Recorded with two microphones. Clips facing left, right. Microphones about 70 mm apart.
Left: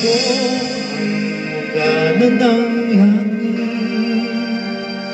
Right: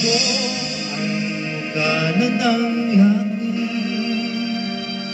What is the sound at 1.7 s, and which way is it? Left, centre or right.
Music, left.